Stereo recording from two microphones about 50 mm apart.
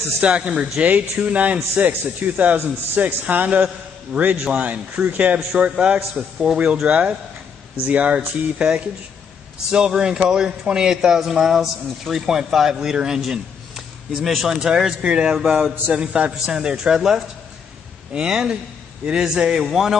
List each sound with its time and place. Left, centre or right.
0.2 s a man's voice: right
5.5 s a man's voice: centre